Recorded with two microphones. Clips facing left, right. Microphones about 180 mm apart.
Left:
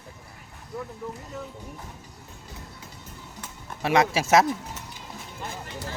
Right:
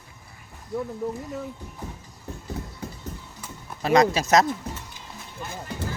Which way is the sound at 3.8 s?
5° left (ahead or behind).